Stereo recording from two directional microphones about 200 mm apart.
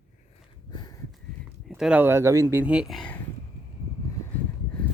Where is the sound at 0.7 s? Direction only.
20° left (ahead or behind).